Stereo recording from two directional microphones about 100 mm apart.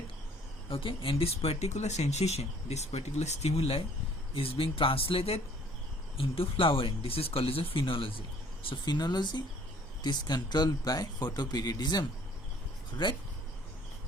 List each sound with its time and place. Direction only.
0.7 s speech: 65° left (ahead or behind); by 3.8 s 85° left
4.4 s speech: 70° left (ahead or behind)
8.6 s speech: 50° left (ahead or behind)